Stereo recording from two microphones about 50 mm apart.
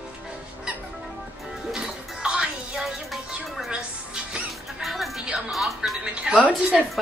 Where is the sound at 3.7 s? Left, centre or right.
Centre.